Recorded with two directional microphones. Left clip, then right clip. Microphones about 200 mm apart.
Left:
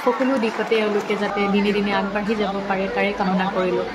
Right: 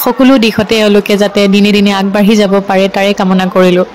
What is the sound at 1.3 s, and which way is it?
Speech, 55° right (ahead or behind).